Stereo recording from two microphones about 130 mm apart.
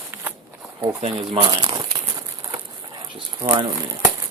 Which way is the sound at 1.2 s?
35° right (ahead or behind).